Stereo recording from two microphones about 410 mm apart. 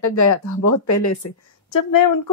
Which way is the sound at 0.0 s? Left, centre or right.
Left.